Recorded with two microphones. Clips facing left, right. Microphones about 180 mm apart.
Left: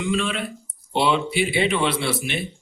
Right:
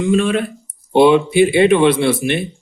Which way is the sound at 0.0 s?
45° right (ahead or behind).